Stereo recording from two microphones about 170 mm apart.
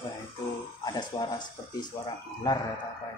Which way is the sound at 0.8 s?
25° left (ahead or behind).